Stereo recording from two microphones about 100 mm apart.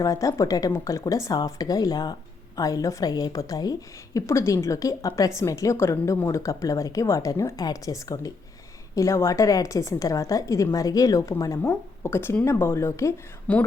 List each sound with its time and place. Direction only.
0.0 s a woman's voice: 35° left (ahead or behind)
13.5 s a woman's voice: 10° left (ahead or behind)